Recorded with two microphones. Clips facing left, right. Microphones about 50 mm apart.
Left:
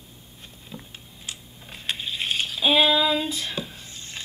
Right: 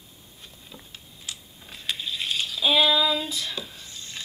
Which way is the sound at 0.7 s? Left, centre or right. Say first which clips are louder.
Left 7 dB; centre.